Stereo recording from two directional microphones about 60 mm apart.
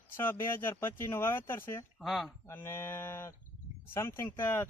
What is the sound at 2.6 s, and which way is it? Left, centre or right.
Speech, left.